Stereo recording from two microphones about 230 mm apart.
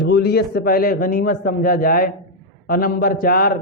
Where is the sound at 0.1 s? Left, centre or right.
Left.